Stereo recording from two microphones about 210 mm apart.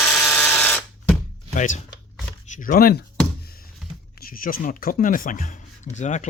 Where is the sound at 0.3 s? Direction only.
10° left (ahead or behind).